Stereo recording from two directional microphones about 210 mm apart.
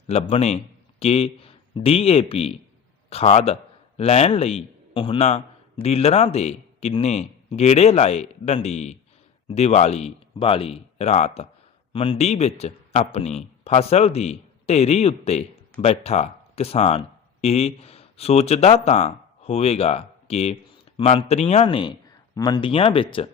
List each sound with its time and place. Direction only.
0.1 s a man's voice: 30° left (ahead or behind)